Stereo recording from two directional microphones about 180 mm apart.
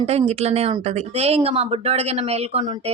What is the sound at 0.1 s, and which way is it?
A woman's voice, 35° right (ahead or behind).